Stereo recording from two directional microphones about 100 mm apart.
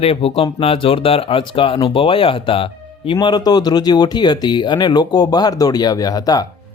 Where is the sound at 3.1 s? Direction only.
45° left (ahead or behind).